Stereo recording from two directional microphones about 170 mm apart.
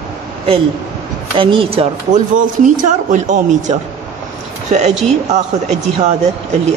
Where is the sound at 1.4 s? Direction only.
30° right (ahead or behind).